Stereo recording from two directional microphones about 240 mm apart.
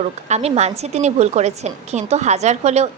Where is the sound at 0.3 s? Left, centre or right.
Right.